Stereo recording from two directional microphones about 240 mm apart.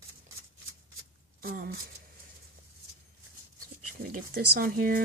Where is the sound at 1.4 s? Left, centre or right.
Right.